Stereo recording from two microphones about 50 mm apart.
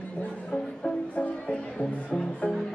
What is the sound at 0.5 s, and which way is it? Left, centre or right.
Music, centre.